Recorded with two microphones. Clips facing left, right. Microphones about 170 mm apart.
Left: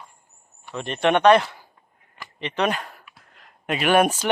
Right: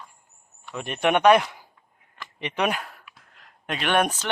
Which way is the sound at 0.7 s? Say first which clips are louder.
Left 2 dB; 10° right (ahead or behind).